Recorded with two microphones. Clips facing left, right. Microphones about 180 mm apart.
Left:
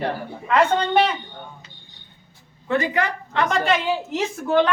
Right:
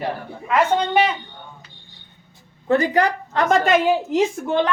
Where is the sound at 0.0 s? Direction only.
5° right (ahead or behind).